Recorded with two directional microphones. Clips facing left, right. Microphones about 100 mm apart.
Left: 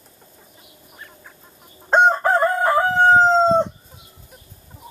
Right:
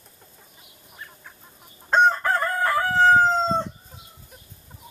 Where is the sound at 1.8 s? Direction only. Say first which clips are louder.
Left 4 dB; 20° left (ahead or behind).